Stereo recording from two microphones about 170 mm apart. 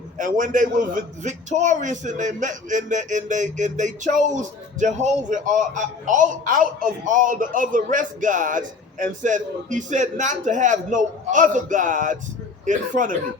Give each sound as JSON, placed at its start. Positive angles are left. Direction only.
{"t": 0.2, "sound": "a man's voice", "side_deg": -50}